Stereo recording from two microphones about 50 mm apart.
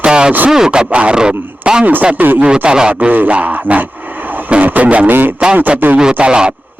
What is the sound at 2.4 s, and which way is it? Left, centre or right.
Speech, centre.